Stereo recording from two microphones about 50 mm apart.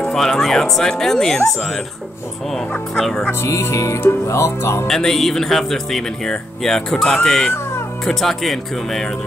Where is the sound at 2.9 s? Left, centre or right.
Centre.